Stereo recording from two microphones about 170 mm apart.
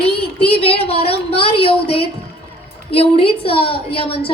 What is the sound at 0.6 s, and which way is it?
A woman's voice, 35° left (ahead or behind).